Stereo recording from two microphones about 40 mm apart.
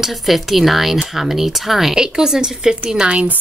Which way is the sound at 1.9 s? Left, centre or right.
Centre.